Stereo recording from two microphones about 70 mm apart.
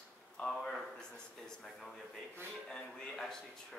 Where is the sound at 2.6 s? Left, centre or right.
Centre.